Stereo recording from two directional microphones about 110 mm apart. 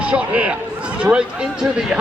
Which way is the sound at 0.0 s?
10° right (ahead or behind).